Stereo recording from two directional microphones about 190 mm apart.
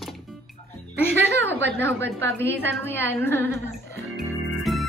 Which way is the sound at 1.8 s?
10° left (ahead or behind).